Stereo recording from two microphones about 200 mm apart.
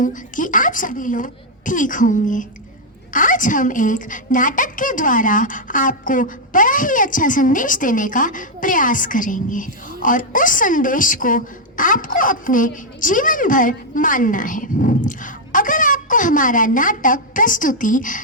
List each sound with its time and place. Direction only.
0.0 s a woman's voice: 40° left (ahead or behind)